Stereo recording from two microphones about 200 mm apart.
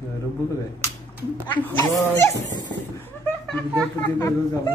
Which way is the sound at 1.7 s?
15° left (ahead or behind).